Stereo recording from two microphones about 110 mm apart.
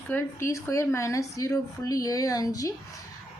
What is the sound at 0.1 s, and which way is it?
A woman's voice, 20° left (ahead or behind).